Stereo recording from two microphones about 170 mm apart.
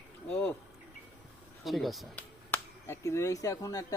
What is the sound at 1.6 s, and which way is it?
Speech, centre (ahead or behind).